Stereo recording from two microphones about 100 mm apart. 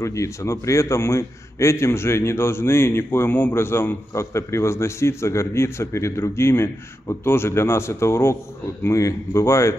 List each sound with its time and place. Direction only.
0.0 s a man's voice: 30° left (ahead or behind)